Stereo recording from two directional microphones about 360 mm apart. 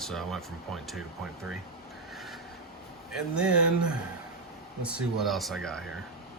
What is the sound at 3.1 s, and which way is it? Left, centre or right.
Speech, centre.